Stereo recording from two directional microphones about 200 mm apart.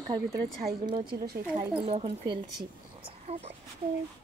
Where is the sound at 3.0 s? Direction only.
30° right (ahead or behind).